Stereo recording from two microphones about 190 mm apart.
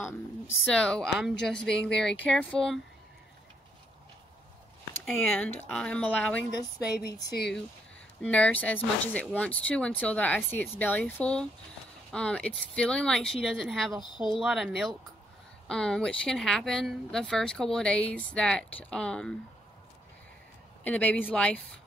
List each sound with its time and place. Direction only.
0.7 s speech: 5° left (ahead or behind)
5.0 s speech: 5° left (ahead or behind)
7.2 s speech: 60° left (ahead or behind)
8.2 s speech: 5° left (ahead or behind)
14.0 s speech: 25° left (ahead or behind)
14.3 s speech: centre (ahead or behind)
20.8 s speech: 10° left (ahead or behind)